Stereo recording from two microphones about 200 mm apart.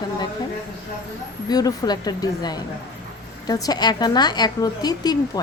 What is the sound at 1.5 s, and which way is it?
A woman's voice, 20° left (ahead or behind).